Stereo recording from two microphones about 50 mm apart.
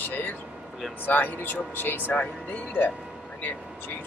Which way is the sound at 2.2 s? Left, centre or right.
Left.